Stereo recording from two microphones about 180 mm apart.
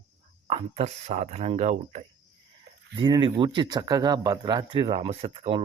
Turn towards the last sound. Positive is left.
turn(degrees=-35)  # may be behind; listen again after turning